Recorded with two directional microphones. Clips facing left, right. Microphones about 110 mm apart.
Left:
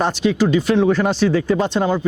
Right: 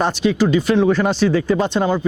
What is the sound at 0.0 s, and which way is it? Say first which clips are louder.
Speech: even; 20° right (ahead or behind).